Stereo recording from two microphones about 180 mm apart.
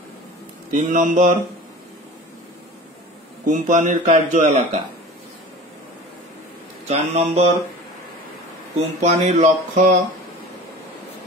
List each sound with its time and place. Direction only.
0.7 s speech: 45° right (ahead or behind)
3.4 s speech: 45° right (ahead or behind)
6.9 s speech: 35° right (ahead or behind)
8.7 s speech: 40° right (ahead or behind)